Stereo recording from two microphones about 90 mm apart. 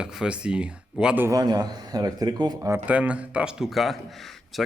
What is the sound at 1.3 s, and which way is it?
A man's voice, 45° right (ahead or behind).